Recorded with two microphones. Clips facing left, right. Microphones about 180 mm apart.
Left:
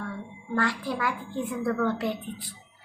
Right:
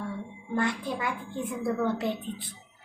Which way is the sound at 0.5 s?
20° right (ahead or behind).